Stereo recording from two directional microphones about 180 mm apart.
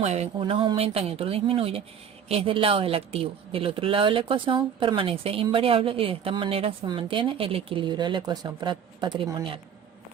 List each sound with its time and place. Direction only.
0.0 s speech: 35° right (ahead or behind)